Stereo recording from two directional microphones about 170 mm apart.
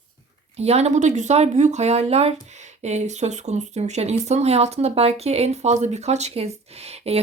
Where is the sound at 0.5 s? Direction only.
40° right (ahead or behind).